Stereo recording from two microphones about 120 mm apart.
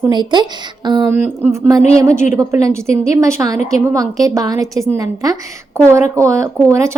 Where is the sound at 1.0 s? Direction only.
15° right (ahead or behind).